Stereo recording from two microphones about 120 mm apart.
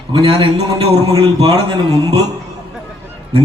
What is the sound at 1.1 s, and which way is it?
Speech, 35° right (ahead or behind).